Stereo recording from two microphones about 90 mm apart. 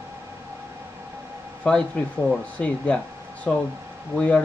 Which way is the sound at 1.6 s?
10° left (ahead or behind).